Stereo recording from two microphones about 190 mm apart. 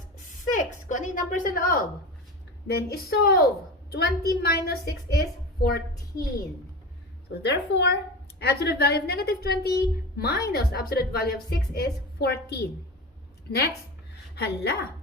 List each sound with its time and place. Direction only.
0.5 s a woman's voice: 40° left (ahead or behind)
7.3 s a woman's voice: 65° left (ahead or behind)
14.3 s a woman's voice: 60° left (ahead or behind)